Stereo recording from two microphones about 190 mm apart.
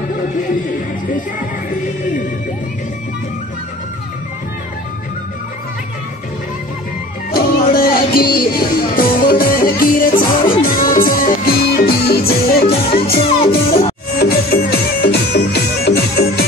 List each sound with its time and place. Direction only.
7.3 s music: 50° left (ahead or behind)
13.5 s music: 30° left (ahead or behind)
14.1 s music: 55° left (ahead or behind)